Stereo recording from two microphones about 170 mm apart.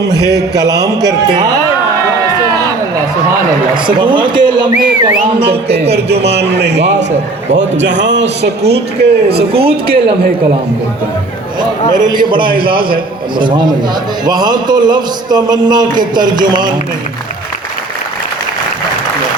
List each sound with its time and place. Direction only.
0.2 s a sound: 20° left (ahead or behind)
0.5 s a man's voice: 25° right (ahead or behind)
4.0 s a man's voice: 30° right (ahead or behind)
5.9 s a man's voice: 75° right (ahead or behind)
12.0 s a man's voice: 25° right (ahead or behind)